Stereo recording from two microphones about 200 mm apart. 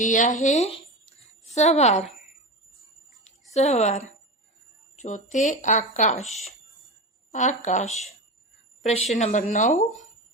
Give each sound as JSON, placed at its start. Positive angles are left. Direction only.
{"t": 0.0, "sound": "speech", "side_deg": 40}
{"t": 3.5, "sound": "speech", "side_deg": 35}